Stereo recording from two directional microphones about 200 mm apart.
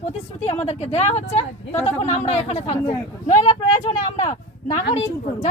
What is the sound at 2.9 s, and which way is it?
Speech, 20° left (ahead or behind).